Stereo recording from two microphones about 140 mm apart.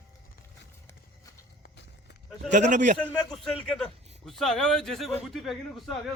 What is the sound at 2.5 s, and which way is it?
Speech, 60° right (ahead or behind).